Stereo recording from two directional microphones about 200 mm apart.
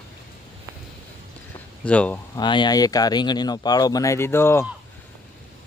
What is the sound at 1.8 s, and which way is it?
Speech, 5° left (ahead or behind).